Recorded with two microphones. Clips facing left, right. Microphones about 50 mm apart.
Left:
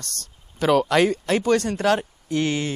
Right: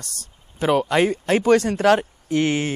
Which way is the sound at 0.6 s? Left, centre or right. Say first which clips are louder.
Even; centre.